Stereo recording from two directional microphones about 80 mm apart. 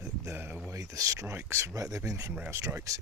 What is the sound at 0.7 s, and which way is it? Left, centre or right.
Speech, right.